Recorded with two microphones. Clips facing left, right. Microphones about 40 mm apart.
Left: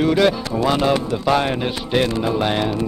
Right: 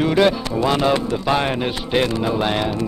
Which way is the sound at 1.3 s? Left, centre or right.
Centre.